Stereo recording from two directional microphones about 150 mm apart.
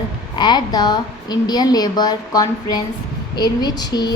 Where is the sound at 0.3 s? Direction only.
30° left (ahead or behind).